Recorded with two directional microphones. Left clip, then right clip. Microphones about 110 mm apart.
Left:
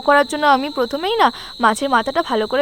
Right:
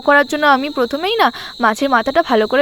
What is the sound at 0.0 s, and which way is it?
Speech, 20° right (ahead or behind).